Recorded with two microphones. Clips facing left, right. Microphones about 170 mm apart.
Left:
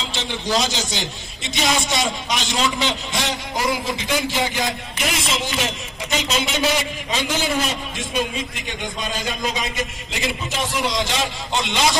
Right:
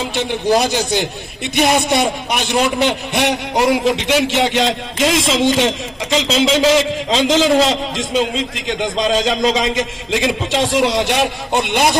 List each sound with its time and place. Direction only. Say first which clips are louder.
0.0 s a man's voice: right 8 dB; 55° right (ahead or behind)